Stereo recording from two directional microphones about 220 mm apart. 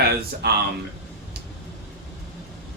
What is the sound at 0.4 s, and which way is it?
Speech, 45° right (ahead or behind).